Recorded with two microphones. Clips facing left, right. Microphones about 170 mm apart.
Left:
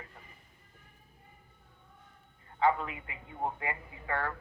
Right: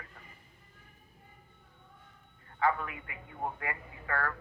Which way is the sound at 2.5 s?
20° left (ahead or behind).